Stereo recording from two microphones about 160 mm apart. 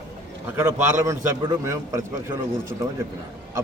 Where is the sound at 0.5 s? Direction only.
20° right (ahead or behind).